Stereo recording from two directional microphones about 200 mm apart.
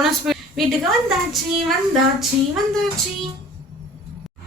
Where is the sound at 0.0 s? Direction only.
Centre (ahead or behind).